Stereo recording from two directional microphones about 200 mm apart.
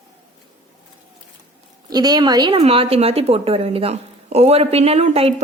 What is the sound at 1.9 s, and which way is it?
A woman's voice, 20° right (ahead or behind).